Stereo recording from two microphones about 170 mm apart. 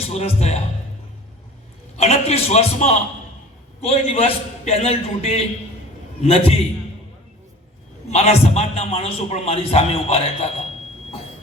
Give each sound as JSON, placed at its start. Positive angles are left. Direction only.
{"t": 0.1, "sound": "a man's voice", "side_deg": 40}
{"t": 2.0, "sound": "a man's voice", "side_deg": 40}
{"t": 8.1, "sound": "a man's voice", "side_deg": 40}